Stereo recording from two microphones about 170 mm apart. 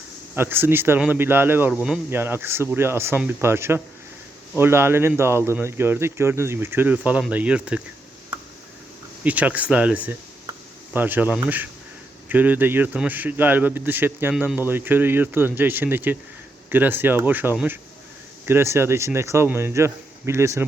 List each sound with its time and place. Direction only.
0.3 s speech: 10° right (ahead or behind)
9.2 s speech: 10° right (ahead or behind)